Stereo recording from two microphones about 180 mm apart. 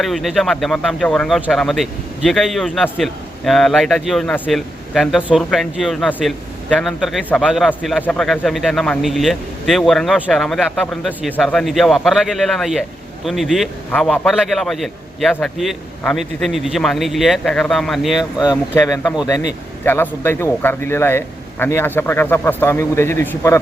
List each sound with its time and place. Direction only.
0.0 s a man's voice: centre (ahead or behind)
18.2 s speech: 20° left (ahead or behind)